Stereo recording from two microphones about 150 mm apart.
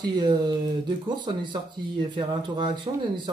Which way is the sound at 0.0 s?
30° right (ahead or behind).